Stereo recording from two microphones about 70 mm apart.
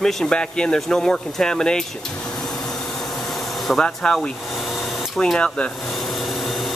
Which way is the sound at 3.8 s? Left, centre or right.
Centre.